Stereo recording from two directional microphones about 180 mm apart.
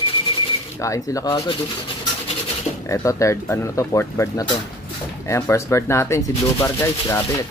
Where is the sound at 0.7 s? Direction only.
20° left (ahead or behind).